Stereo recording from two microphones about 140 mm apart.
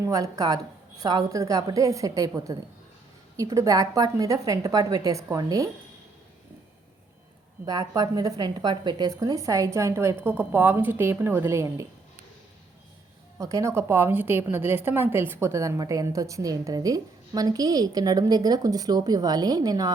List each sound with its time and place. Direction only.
0.0 s a woman's voice: 25° right (ahead or behind)
7.6 s a woman's voice: 25° right (ahead or behind)
13.4 s a woman's voice: 20° right (ahead or behind)